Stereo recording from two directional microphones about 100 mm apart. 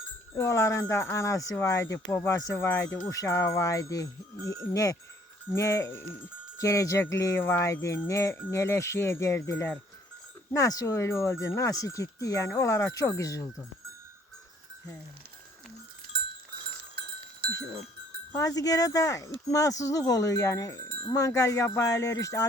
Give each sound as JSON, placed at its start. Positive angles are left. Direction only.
{"t": 0.3, "sound": "speech", "side_deg": 30}
{"t": 18.3, "sound": "speech", "side_deg": 35}